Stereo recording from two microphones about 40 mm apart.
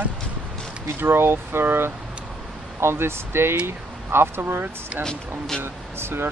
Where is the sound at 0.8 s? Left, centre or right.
Right.